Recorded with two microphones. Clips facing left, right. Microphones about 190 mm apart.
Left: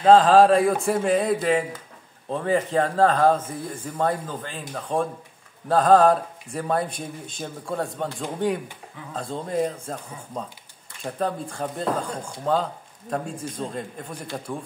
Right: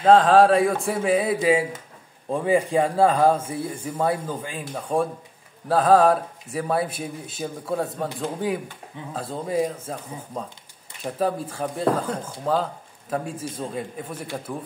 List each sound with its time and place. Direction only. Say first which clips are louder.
0.0 s a man's voice: left 1 dB; centre (ahead or behind)